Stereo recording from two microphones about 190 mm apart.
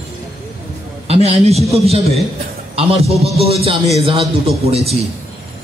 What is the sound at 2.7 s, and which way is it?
A man's voice, 30° right (ahead or behind).